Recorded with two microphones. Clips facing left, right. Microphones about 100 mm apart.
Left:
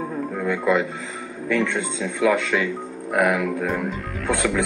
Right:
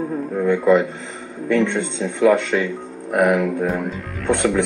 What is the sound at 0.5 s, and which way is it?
Speech, 35° right (ahead or behind).